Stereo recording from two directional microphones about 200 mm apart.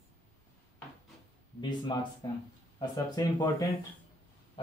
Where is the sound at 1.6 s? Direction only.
25° left (ahead or behind).